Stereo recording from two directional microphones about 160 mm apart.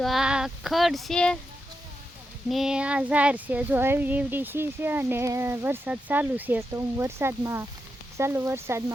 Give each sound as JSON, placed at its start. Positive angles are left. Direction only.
{"t": 0.0, "sound": "child singing", "side_deg": 0}
{"t": 2.5, "sound": "speech", "side_deg": -5}